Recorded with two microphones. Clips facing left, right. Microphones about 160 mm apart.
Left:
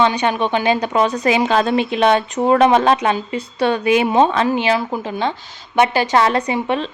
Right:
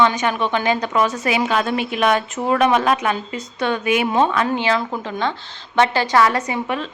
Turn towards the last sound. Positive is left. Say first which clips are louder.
# left 4 dB
turn(degrees=25)  # may be behind; listen again after turning